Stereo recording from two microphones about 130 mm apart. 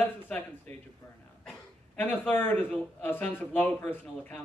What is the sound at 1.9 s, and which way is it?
A man's voice, 15° left (ahead or behind).